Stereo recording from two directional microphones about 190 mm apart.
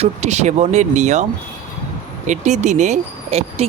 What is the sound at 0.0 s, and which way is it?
Speech, 35° right (ahead or behind).